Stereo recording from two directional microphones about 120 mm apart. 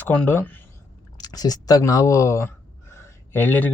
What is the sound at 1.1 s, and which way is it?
Speech, 35° left (ahead or behind).